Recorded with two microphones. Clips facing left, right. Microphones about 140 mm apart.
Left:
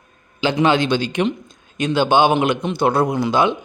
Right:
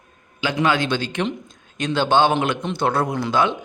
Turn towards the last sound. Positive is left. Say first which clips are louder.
# left 3 dB
turn(degrees=15)  # may be behind; listen again after turning